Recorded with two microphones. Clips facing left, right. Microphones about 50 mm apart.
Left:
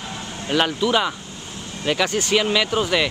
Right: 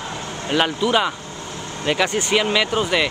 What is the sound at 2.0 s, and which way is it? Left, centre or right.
Speech, right.